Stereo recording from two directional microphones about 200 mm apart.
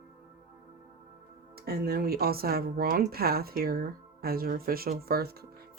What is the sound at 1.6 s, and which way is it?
Speech, 50° right (ahead or behind).